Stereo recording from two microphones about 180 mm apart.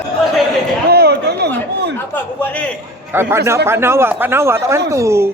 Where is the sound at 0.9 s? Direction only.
60° right (ahead or behind).